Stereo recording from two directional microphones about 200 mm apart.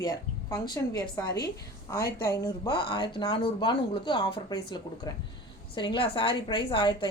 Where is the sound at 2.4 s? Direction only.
20° left (ahead or behind).